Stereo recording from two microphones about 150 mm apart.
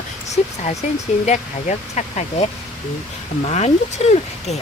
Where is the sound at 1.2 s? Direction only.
50° left (ahead or behind).